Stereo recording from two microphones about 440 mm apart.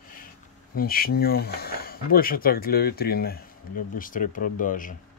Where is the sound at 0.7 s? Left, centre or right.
Centre.